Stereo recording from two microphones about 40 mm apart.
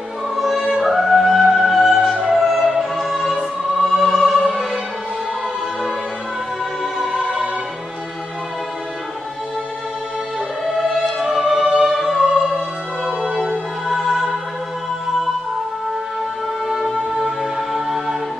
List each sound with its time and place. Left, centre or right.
0.4 s music: centre
2.2 s opera: centre
10.6 s music: centre
12.4 s music: centre
16.6 s music: centre